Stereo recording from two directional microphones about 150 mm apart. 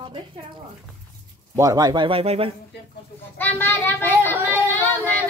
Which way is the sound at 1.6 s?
25° right (ahead or behind).